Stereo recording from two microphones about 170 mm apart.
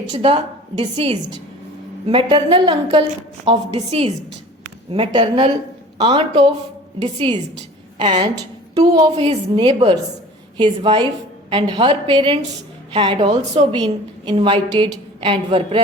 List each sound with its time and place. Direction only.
0.8 s a woman's voice: 35° right (ahead or behind)